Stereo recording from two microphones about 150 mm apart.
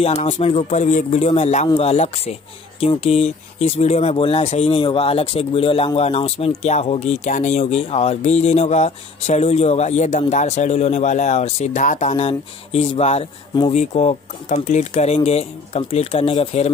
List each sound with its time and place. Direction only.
0.0 s speech: 45° left (ahead or behind)